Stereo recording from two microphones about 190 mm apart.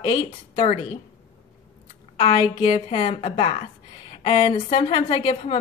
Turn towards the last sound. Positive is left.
turn(degrees=30)  # may be behind; listen again after turning